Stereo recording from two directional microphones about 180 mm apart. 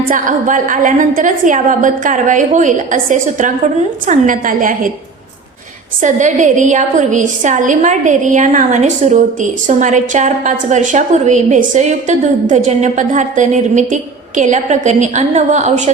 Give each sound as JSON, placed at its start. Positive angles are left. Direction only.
{"t": 0.1, "sound": "a woman's voice", "side_deg": -45}
{"t": 6.0, "sound": "a woman's voice", "side_deg": -45}